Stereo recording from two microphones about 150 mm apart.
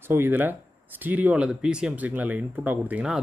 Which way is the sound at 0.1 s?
15° right (ahead or behind).